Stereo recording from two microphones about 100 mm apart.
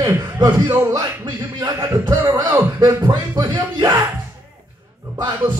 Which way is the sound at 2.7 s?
30° right (ahead or behind).